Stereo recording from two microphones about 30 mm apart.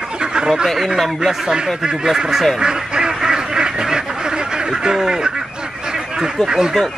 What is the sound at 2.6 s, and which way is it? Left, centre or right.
Speech, right.